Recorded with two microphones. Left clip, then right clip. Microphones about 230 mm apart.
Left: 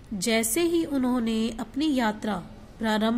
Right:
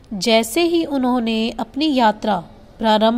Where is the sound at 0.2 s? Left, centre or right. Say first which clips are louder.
Right 9 dB; centre.